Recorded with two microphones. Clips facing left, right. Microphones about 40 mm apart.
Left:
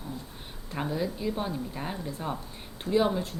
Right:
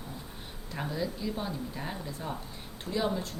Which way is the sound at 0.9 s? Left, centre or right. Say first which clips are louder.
Left 3 dB; centre.